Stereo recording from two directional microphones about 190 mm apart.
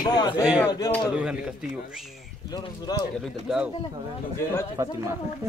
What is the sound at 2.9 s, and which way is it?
Speech, 20° left (ahead or behind).